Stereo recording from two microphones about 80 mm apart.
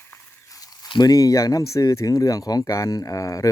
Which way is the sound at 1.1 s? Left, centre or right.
Left.